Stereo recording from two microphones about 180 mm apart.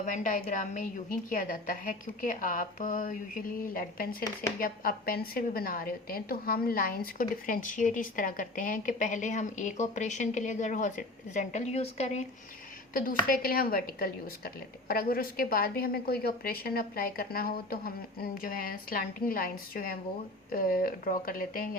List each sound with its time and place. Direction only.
0.0 s a woman's voice: 45° left (ahead or behind)
12.9 s a woman's voice: 55° left (ahead or behind)